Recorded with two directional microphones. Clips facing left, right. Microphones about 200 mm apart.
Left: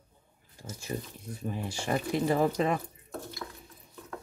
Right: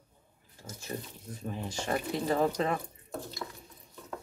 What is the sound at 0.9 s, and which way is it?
Speech, 15° left (ahead or behind).